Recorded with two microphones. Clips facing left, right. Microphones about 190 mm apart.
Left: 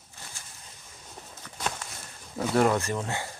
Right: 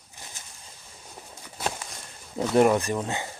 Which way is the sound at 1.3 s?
10° right (ahead or behind).